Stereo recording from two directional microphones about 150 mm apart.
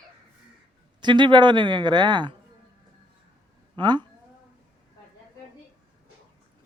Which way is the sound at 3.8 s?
30° right (ahead or behind).